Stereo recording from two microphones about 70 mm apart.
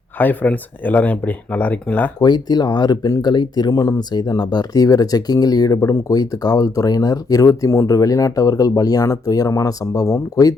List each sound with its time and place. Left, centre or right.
0.2 s speech: left
2.2 s speech: left
3.8 s speech: left
4.1 s speech: left